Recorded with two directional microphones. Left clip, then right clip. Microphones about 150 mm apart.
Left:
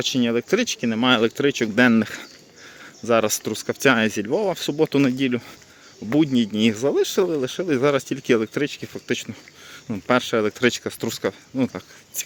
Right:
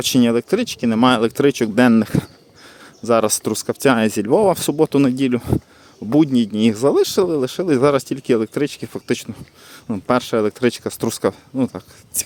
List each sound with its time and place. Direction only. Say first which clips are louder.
0.2 s speech: right 5 dB; 35° right (ahead or behind)
0.9 s speech: right 4 dB; 45° right (ahead or behind)
11.5 s speech: right 3 dB; 25° right (ahead or behind)